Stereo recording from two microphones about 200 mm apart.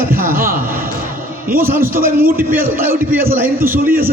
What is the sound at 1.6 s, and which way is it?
Speech, 10° right (ahead or behind).